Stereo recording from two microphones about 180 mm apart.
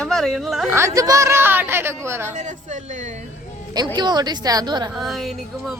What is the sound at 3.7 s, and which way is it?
A woman's voice, 25° right (ahead or behind).